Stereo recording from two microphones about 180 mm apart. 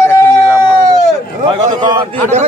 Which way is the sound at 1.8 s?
25° right (ahead or behind).